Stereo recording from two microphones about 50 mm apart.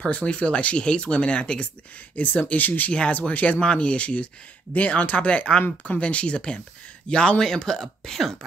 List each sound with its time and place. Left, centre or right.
0.0 s speech: left
2.9 s speech: centre